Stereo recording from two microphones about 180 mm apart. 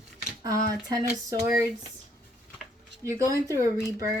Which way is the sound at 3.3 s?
20° right (ahead or behind).